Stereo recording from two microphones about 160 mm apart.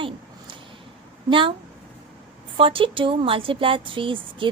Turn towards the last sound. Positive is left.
turn(degrees=-30)  # may be behind; listen again after turning